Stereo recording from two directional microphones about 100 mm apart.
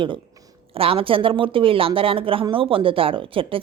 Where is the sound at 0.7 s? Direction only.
70° right (ahead or behind).